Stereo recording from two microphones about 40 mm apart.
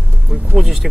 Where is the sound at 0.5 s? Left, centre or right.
Centre.